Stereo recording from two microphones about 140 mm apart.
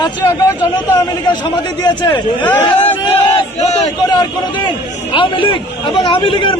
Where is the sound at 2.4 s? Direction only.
10° left (ahead or behind).